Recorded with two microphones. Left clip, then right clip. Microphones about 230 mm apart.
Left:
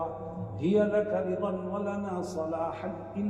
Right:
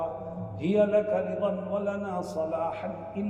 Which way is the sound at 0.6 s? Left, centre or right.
Right.